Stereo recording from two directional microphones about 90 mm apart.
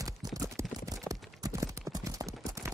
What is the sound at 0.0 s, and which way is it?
Clip-clop, 40° right (ahead or behind).